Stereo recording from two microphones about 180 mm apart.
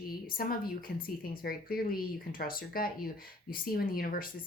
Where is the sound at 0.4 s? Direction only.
55° left (ahead or behind).